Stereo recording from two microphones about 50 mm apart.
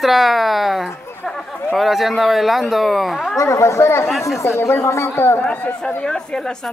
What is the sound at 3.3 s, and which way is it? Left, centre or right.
Speech, left.